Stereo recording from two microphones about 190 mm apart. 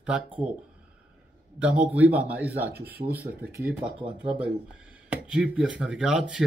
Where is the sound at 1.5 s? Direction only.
5° right (ahead or behind).